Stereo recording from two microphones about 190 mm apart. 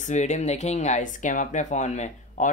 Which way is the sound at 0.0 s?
40° left (ahead or behind).